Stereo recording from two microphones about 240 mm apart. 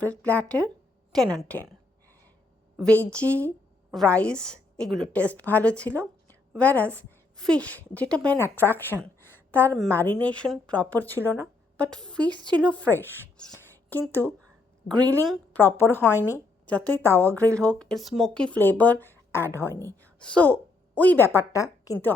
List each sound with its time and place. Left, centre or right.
0.0 s a woman's voice: centre
2.7 s a woman's voice: centre
12.4 s a woman's voice: centre
12.6 s speech: centre
14.9 s a woman's voice: centre
15.3 s a woman's voice: centre